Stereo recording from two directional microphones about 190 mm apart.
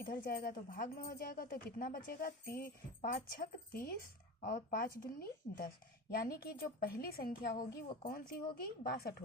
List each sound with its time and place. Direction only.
0.1 s speech: 50° left (ahead or behind)